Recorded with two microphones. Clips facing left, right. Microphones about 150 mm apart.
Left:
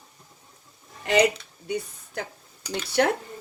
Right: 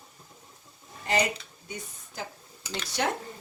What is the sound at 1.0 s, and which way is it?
Speech, 70° left (ahead or behind).